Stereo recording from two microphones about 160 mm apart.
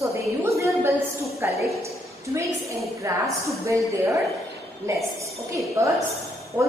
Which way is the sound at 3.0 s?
20° right (ahead or behind).